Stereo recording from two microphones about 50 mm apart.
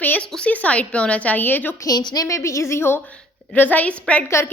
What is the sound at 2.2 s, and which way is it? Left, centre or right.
Speech, left.